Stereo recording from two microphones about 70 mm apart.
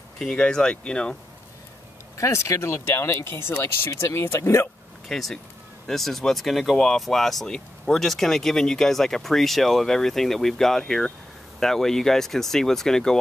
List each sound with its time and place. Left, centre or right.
0.2 s speech: centre
2.1 s speech: left
5.0 s speech: centre